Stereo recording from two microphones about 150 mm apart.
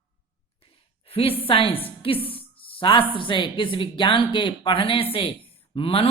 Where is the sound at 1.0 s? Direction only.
40° left (ahead or behind).